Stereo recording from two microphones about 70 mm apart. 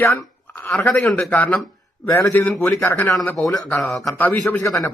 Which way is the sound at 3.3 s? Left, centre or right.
Centre.